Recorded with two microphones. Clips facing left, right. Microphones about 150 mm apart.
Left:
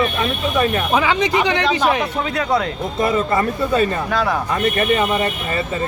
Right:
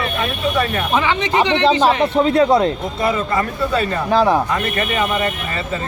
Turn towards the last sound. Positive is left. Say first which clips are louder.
# right 5 dB
turn(degrees=-30)  # may be behind; listen again after turning